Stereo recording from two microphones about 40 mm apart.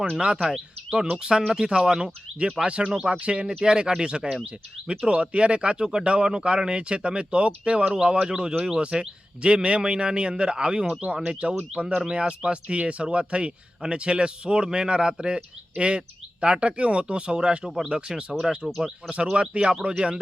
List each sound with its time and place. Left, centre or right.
0.2 s speech: right
2.6 s speech: right